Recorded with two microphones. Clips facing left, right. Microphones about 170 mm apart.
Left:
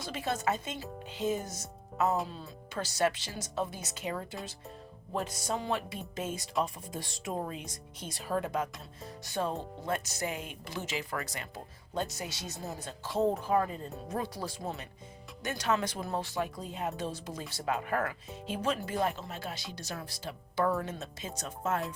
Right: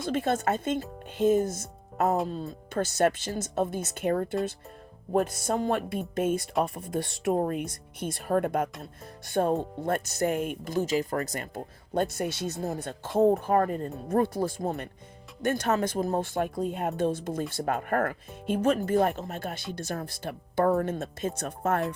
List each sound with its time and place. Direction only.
0.0 s speech: 55° right (ahead or behind)